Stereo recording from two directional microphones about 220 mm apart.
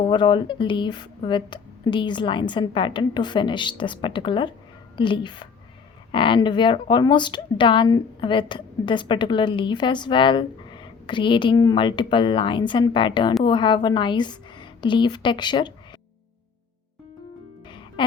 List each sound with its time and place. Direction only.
0.1 s a woman's voice: 20° left (ahead or behind)
17.7 s music: 20° left (ahead or behind)